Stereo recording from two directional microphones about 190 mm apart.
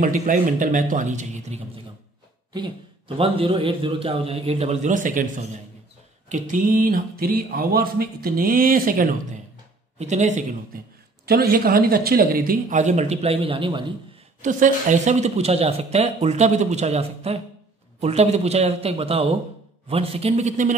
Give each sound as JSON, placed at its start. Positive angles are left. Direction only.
{"t": 0.0, "sound": "speech", "side_deg": -40}
{"t": 3.2, "sound": "speech", "side_deg": -30}
{"t": 9.9, "sound": "speech", "side_deg": -40}
{"t": 11.2, "sound": "speech", "side_deg": -50}
{"t": 14.4, "sound": "speech", "side_deg": -40}